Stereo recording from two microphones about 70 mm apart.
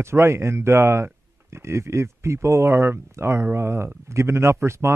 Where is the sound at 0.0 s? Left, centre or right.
Right.